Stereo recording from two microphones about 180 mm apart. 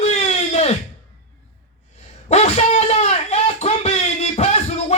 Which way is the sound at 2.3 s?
40° left (ahead or behind).